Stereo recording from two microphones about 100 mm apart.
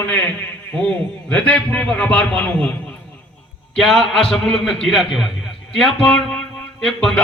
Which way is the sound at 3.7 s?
5° left (ahead or behind).